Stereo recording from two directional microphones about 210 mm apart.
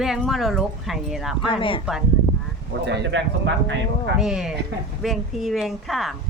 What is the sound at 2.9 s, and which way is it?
Speech, 55° right (ahead or behind).